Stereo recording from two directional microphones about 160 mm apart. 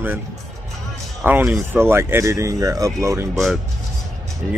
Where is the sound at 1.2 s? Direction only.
10° right (ahead or behind).